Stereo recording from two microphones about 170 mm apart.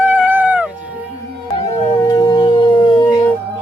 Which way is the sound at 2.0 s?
20° left (ahead or behind).